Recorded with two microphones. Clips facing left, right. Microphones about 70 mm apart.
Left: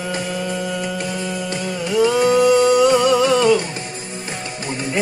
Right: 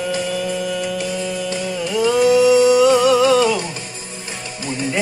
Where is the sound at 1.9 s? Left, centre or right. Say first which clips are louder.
Right 1 dB; centre.